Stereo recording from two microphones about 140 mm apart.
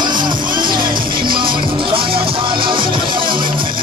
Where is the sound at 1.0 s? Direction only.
90° right.